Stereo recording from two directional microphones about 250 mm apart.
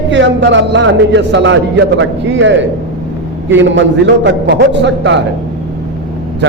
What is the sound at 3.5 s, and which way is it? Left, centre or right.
A man's voice, right.